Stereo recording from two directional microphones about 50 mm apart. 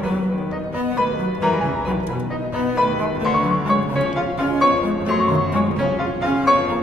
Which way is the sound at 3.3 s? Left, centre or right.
Centre.